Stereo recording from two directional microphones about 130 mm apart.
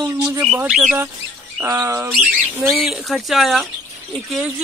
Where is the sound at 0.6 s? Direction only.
5° right (ahead or behind).